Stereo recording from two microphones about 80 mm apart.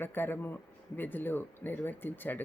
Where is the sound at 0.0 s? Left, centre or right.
Left.